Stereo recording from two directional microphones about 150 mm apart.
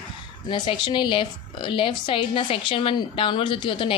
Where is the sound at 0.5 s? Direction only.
30° left (ahead or behind).